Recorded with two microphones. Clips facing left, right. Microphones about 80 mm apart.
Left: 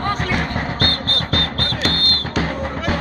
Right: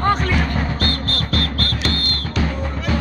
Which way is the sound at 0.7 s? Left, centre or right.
Left.